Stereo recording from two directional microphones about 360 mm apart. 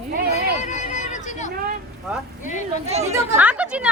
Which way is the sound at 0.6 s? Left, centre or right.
Centre.